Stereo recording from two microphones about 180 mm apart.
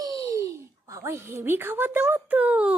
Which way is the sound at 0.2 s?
15° right (ahead or behind).